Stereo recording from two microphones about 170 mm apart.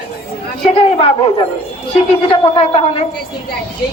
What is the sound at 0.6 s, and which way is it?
Speech, 35° left (ahead or behind).